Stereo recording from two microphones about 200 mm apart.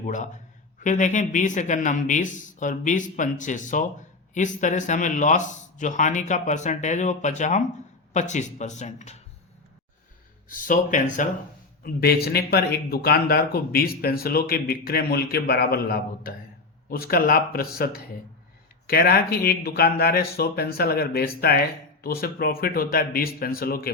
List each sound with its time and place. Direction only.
0.0 s a man's voice: 40° left (ahead or behind)
10.5 s speech: 40° left (ahead or behind)